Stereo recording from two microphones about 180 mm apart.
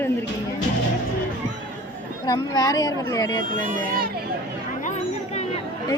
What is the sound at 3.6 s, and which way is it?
Speech, 45° right (ahead or behind).